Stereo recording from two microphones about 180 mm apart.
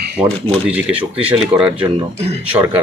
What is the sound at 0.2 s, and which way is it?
Speech, 30° right (ahead or behind).